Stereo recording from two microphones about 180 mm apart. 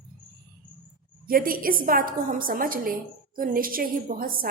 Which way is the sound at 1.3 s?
55° right (ahead or behind).